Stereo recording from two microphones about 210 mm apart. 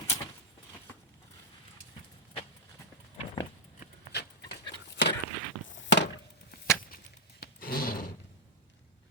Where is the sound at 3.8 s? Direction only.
50° left (ahead or behind).